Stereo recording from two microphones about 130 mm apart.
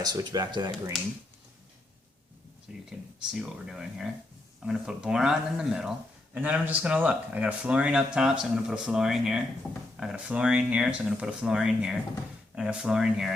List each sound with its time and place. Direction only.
0.0 s speech: 30° right (ahead or behind)
2.7 s speech: 5° right (ahead or behind)
9.6 s speech: 5° left (ahead or behind)
10.0 s speech: 5° right (ahead or behind)